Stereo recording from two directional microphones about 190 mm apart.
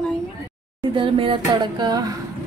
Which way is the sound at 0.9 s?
25° right (ahead or behind).